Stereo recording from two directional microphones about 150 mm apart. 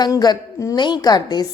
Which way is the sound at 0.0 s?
25° left (ahead or behind).